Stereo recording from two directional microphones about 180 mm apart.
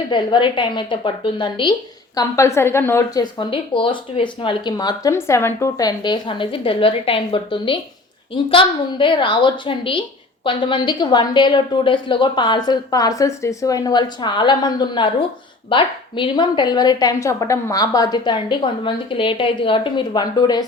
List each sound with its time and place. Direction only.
0.1 s a woman's voice: 25° left (ahead or behind)
3.3 s a woman's voice: 25° left (ahead or behind)